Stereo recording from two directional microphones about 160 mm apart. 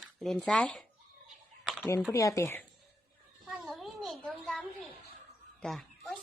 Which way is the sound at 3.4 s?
Centre (ahead or behind).